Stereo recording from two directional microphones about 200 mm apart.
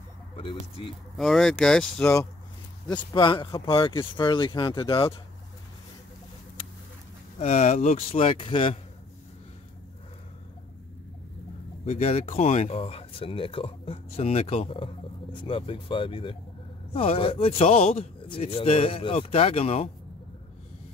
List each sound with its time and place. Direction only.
0.4 s speech: 25° left (ahead or behind)
1.1 s speech: centre (ahead or behind)
2.9 s speech: 20° left (ahead or behind)
7.3 s speech: 30° left (ahead or behind)
11.8 s speech: 30° left (ahead or behind)